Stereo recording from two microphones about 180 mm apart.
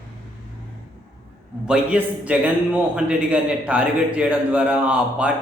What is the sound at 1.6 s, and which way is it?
A man's voice, 5° right (ahead or behind).